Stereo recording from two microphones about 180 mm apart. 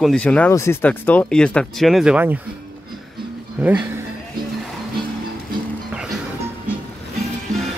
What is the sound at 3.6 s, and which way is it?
Speech, 10° right (ahead or behind).